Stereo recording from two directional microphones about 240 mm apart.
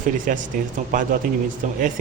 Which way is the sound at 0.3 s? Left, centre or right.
Right.